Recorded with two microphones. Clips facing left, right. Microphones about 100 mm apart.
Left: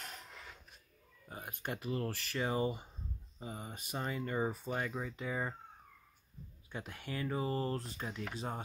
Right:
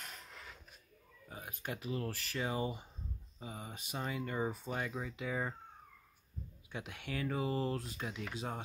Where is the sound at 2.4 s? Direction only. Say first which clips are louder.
Left 3 dB; 5° right (ahead or behind).